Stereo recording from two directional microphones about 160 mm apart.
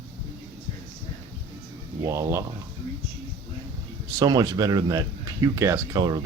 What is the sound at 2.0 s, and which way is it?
Speech, 20° right (ahead or behind).